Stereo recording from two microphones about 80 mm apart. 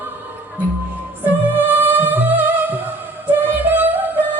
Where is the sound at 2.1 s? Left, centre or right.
Right.